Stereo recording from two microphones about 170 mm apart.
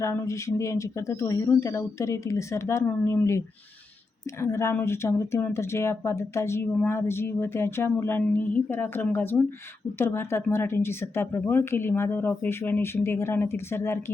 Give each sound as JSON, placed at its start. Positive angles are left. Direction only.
{"t": 0.0, "sound": "speech", "side_deg": 15}